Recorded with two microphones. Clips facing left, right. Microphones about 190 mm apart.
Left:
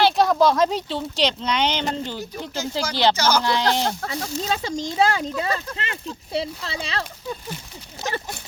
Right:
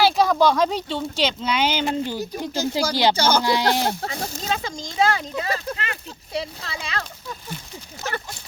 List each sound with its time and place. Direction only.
0.0 s speech: centre (ahead or behind)
3.2 s speech: 30° right (ahead or behind)
3.4 s speech: 10° right (ahead or behind)
4.1 s speech: 35° left (ahead or behind)